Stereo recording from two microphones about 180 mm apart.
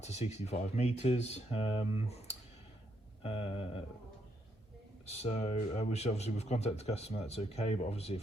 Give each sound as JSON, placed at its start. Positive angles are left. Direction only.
{"t": 0.0, "sound": "speech", "side_deg": 40}
{"t": 3.2, "sound": "speech", "side_deg": 35}
{"t": 5.0, "sound": "speech", "side_deg": 35}